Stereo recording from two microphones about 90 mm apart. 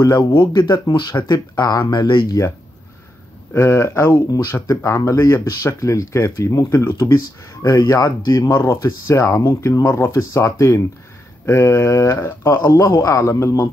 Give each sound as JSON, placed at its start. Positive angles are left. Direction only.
{"t": 0.5, "sound": "speech", "side_deg": 50}
{"t": 2.2, "sound": "speech", "side_deg": 45}
{"t": 3.5, "sound": "speech", "side_deg": 30}
{"t": 7.6, "sound": "speech", "side_deg": 45}